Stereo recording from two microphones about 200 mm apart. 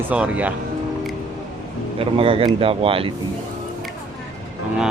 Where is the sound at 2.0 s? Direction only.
30° right (ahead or behind).